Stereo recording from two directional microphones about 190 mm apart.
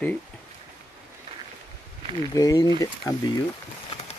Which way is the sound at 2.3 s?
20° left (ahead or behind).